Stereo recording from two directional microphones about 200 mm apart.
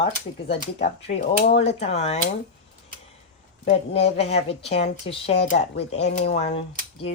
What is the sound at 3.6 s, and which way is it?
A woman's voice, 30° left (ahead or behind).